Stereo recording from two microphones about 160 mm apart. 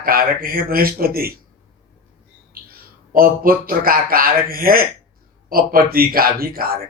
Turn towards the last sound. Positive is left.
turn(degrees=-70)  # may be behind; listen again after turning